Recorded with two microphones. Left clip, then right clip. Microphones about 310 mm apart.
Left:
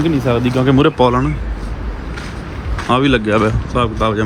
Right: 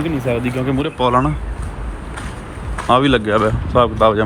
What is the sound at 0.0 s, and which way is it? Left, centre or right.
Speech, centre.